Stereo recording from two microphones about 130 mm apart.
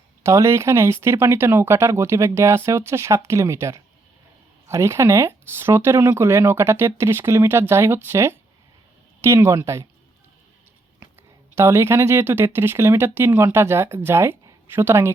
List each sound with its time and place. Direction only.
0.3 s speech: 20° right (ahead or behind)
11.5 s speech: 20° right (ahead or behind)